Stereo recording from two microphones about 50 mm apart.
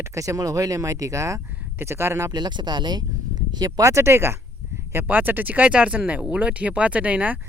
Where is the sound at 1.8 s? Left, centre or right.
Right.